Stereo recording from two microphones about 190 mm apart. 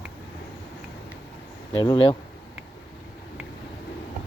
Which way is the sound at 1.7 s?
25° left (ahead or behind).